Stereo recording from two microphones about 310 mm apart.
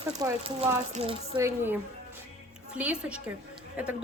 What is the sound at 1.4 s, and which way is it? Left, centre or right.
A woman's voice, centre.